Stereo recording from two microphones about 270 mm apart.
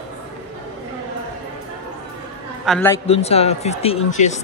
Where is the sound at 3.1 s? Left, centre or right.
Left.